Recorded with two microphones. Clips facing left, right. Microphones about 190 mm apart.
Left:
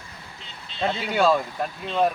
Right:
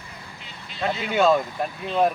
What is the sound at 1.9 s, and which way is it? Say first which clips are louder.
Speech: right 1 dB; 10° right (ahead or behind).